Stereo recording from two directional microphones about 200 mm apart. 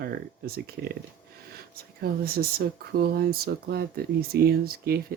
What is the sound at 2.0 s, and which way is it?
Speech, 50° right (ahead or behind).